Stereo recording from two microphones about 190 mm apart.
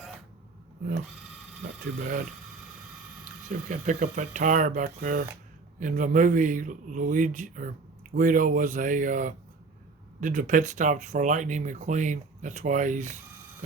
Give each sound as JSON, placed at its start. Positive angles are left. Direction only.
{"t": 2.0, "sound": "speech", "side_deg": -45}
{"t": 3.7, "sound": "speech", "side_deg": -40}